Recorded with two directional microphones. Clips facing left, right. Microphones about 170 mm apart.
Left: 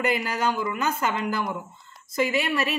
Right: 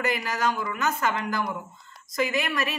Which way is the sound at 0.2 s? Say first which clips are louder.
Left 1 dB; 30° left (ahead or behind).